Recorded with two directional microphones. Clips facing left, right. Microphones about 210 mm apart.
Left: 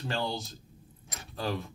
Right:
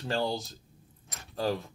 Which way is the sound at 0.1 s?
40° right (ahead or behind).